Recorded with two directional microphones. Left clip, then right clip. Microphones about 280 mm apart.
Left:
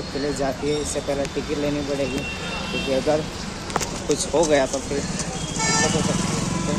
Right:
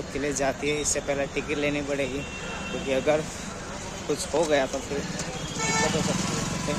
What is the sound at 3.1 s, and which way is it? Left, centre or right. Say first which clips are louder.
Speech: left 2 dB; centre.